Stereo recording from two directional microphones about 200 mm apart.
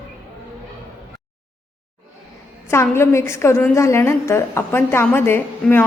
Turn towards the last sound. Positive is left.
turn(degrees=10)  # may be behind; listen again after turning